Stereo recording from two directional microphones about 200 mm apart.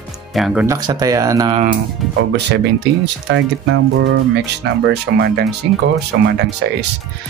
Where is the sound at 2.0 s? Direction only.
Centre (ahead or behind).